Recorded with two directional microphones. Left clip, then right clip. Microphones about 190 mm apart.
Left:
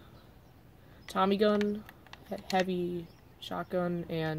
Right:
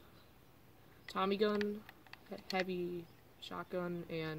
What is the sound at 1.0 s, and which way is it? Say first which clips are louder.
Speech: left 8 dB; 20° left (ahead or behind).